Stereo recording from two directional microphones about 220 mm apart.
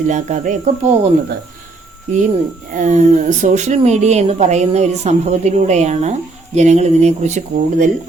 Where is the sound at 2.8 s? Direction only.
35° right (ahead or behind).